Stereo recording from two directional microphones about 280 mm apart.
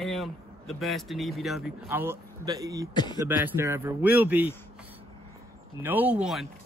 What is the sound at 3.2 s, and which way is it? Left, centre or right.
A man's voice, centre.